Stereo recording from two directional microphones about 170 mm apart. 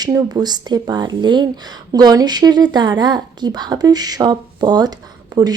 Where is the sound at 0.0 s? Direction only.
25° right (ahead or behind).